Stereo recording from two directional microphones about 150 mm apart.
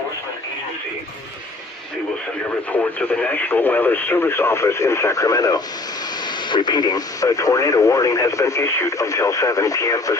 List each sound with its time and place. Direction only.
2.7 s speech: 10° left (ahead or behind)